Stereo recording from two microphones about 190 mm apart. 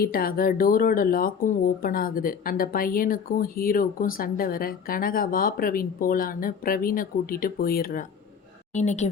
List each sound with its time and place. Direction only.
0.0 s speech: 50° left (ahead or behind)
8.7 s speech: 35° left (ahead or behind)